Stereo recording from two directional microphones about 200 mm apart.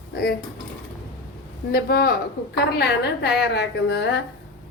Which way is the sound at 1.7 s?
50° left (ahead or behind).